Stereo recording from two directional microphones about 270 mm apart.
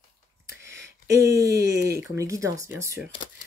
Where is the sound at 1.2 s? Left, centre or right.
Right.